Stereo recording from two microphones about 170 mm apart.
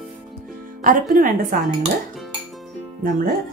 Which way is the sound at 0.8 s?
55° right (ahead or behind).